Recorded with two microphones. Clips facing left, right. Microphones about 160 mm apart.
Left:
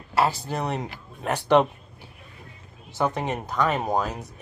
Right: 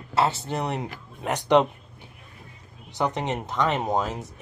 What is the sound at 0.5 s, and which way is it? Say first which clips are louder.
Speech: even; 20° right (ahead or behind).